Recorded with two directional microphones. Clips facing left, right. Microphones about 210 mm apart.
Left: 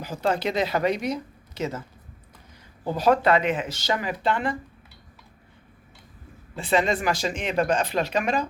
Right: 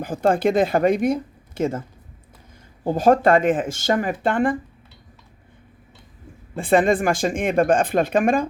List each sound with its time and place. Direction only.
0.0 s speech: 50° right (ahead or behind)
2.8 s speech: 45° right (ahead or behind)
6.6 s speech: 50° right (ahead or behind)